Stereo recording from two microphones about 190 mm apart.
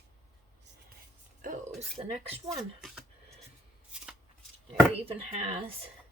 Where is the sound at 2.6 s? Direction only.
Centre (ahead or behind).